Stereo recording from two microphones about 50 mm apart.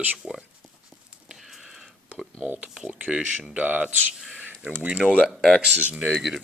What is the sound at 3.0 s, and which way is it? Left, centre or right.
Speech, right.